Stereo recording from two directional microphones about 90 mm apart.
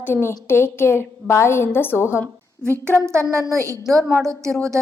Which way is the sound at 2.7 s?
30° right (ahead or behind).